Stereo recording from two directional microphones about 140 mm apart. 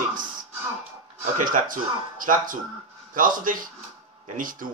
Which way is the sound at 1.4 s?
75° right (ahead or behind).